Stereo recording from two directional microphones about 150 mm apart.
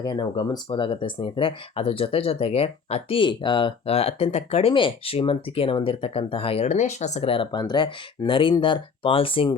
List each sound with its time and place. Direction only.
0.0 s speech: 30° left (ahead or behind)